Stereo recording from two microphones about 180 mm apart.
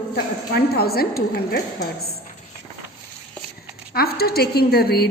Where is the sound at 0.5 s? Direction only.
60° left (ahead or behind).